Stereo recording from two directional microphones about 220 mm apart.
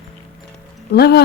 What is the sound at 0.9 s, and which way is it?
Speech, 45° left (ahead or behind).